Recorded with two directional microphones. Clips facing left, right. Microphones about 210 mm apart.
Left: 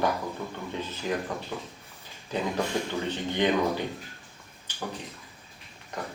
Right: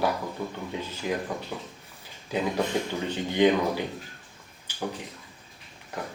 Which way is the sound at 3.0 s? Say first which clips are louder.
Right 8 dB; 10° right (ahead or behind).